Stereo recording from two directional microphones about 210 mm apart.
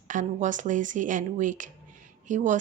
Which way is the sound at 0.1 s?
35° right (ahead or behind).